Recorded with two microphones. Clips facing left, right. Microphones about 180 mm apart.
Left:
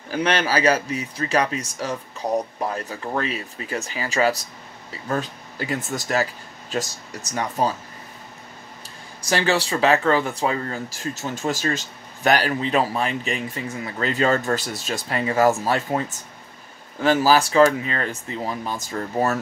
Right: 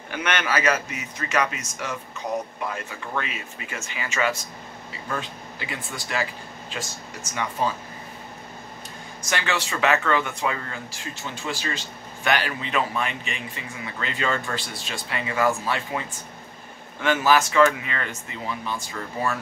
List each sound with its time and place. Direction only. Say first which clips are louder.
0.1 s speech: left 4 dB; 30° left (ahead or behind)
9.2 s speech: left 6 dB; 35° left (ahead or behind)